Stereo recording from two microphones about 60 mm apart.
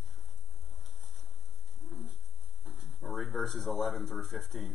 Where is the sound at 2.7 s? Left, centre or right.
Right.